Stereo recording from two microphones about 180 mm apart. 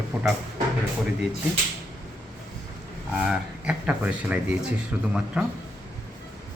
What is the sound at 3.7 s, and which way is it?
Speech, 5° right (ahead or behind).